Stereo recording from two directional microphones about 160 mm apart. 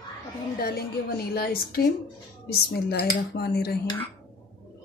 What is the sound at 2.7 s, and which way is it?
Speech, 85° left.